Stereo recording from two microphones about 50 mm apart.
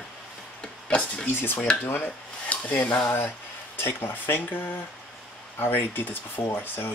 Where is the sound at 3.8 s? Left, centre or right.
Left.